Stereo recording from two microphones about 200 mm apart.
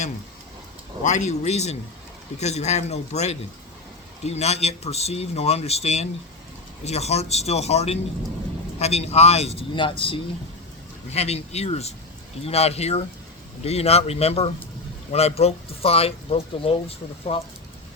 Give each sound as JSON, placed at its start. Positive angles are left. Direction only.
{"t": 1.0, "sound": "speech", "side_deg": 35}